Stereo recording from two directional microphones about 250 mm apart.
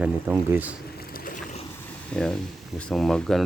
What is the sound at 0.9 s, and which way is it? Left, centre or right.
Vehicle, left.